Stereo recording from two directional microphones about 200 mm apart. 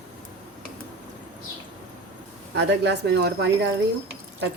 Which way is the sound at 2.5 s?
55° right (ahead or behind).